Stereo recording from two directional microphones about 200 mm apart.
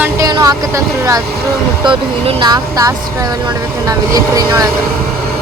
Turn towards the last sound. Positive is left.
turn(degrees=-15)  # may be behind; listen again after turning